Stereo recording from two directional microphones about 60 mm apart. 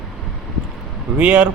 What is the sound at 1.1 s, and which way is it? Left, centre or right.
Speech, right.